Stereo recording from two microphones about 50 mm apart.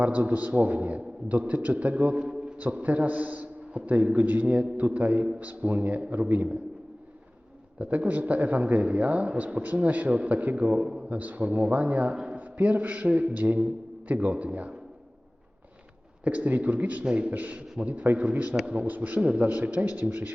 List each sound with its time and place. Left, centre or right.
0.0 s a man's voice: right
2.1 s a sound: centre
2.6 s a man's voice: right
7.8 s a man's voice: right
10.8 s a man's voice: centre
11.1 s a man's voice: right
12.1 s speech: centre
12.4 s a man's voice: right
16.2 s a man's voice: right